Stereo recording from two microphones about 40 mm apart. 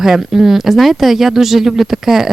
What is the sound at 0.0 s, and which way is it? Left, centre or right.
Speech, centre.